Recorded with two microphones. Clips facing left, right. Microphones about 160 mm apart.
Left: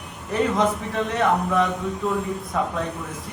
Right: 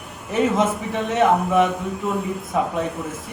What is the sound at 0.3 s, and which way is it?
A man's voice, 5° right (ahead or behind).